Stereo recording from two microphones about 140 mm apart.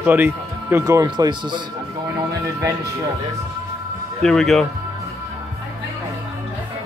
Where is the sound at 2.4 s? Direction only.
20° right (ahead or behind).